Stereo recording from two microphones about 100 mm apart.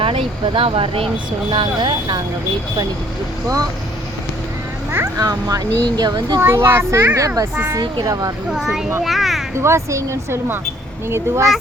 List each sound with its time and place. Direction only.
0.0 s speech: 60° right (ahead or behind)
1.5 s speech: 55° right (ahead or behind)
5.1 s speech: 40° right (ahead or behind)
6.4 s speech: 25° right (ahead or behind)
7.8 s speech: 45° right (ahead or behind)
8.4 s a child's voice: 5° right (ahead or behind)
9.6 s speech: 30° right (ahead or behind)